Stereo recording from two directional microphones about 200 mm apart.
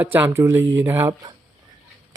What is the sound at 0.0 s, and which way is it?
Speech, 10° right (ahead or behind).